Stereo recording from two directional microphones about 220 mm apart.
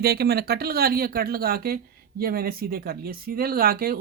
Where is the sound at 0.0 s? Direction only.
45° right (ahead or behind).